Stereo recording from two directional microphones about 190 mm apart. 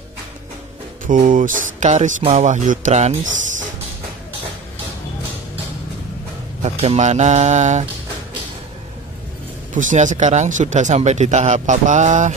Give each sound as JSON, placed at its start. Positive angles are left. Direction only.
{"t": 1.0, "sound": "speech", "side_deg": -45}
{"t": 6.6, "sound": "speech", "side_deg": -35}
{"t": 9.8, "sound": "speech", "side_deg": -40}